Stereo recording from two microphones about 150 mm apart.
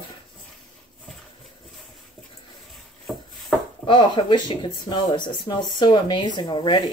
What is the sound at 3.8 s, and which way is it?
Speech, 30° left (ahead or behind).